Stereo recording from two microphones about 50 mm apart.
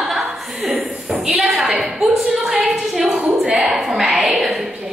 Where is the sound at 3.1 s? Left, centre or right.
Centre.